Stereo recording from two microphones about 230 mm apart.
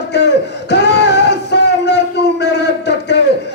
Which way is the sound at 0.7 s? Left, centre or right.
Left.